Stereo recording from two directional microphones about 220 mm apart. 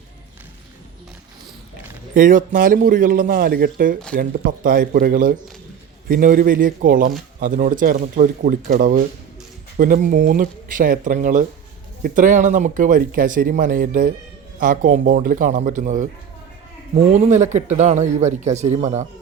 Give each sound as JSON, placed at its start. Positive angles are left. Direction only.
{"t": 2.1, "sound": "speech", "side_deg": -35}